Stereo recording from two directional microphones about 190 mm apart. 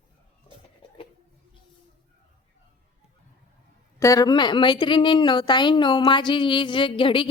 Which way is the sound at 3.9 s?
15° left (ahead or behind).